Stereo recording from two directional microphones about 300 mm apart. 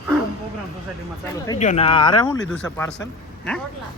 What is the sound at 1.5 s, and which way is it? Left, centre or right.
Speech, left.